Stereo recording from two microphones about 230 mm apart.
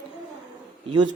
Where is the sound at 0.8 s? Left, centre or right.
Centre.